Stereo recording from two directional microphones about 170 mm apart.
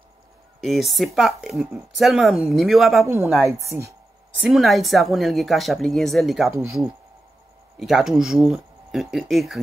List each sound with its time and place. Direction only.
0.6 s speech: centre (ahead or behind)
3.4 s speech: 15° right (ahead or behind)
4.4 s speech: centre (ahead or behind)
7.8 s speech: centre (ahead or behind)